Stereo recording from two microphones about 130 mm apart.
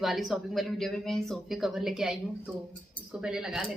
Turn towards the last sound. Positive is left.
turn(degrees=-5)  # may be behind; listen again after turning